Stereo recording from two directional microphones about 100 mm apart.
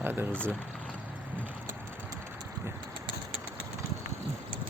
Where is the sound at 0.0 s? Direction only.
20° right (ahead or behind).